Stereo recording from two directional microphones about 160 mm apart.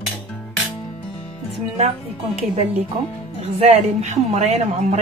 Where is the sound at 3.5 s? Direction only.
40° right (ahead or behind).